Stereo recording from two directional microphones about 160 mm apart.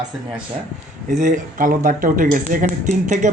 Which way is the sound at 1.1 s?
50° right (ahead or behind).